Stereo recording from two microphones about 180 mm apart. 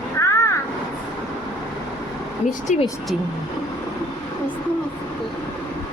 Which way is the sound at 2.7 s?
40° left (ahead or behind).